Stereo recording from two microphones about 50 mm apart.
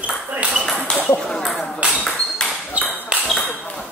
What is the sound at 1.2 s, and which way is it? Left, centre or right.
Ping, centre.